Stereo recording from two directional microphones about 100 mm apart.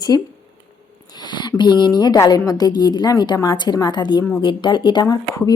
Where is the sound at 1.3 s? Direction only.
50° left (ahead or behind).